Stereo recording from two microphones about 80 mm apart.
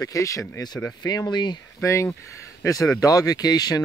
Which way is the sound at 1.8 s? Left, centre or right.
Left.